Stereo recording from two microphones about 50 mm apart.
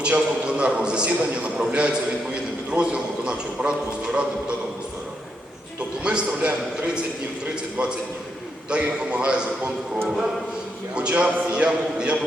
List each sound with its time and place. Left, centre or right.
0.0 s a man's voice: right
6.0 s a man's voice: right
10.9 s a man's voice: right